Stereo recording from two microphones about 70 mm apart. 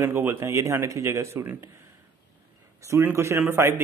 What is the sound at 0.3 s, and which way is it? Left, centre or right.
Speech, right.